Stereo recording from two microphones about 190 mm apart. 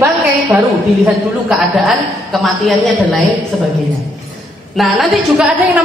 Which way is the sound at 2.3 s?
Centre (ahead or behind).